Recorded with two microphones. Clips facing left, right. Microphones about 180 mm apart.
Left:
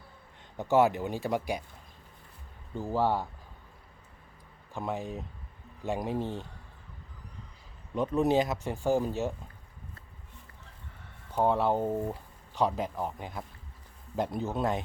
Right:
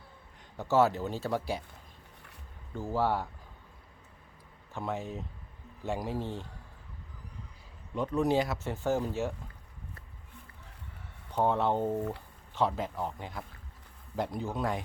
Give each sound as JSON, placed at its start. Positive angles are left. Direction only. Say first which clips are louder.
{"t": 0.5, "sound": "speech", "louder": "left 2 dB", "side_deg": 15}
{"t": 2.7, "sound": "speech", "louder": "left 2 dB", "side_deg": 15}
{"t": 4.7, "sound": "speech", "louder": "left 1 dB", "side_deg": 15}
{"t": 7.9, "sound": "speech", "louder": "left 2 dB", "side_deg": 20}
{"t": 11.3, "sound": "speech", "louder": "left 1 dB", "side_deg": 10}